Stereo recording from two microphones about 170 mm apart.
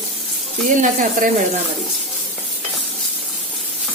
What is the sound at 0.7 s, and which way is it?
Speech, 50° right (ahead or behind).